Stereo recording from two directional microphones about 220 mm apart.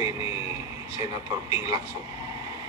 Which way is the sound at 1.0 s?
15° right (ahead or behind).